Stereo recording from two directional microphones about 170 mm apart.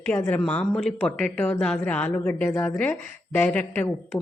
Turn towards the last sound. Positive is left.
turn(degrees=10)  # may be behind; listen again after turning